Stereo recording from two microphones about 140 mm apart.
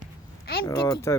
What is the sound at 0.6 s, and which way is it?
Speech, 20° left (ahead or behind).